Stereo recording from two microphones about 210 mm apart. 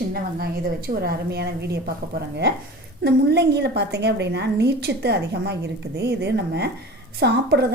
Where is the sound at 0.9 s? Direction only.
50° right (ahead or behind).